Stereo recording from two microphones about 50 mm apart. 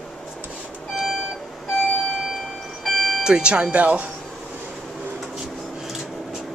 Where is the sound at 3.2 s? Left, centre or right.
Centre.